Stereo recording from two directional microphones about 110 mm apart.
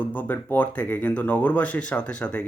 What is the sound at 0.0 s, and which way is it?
Speech, 15° left (ahead or behind).